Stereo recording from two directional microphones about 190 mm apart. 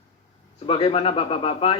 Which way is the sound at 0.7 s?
30° left (ahead or behind).